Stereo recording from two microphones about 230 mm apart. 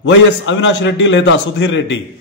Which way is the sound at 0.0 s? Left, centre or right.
Left.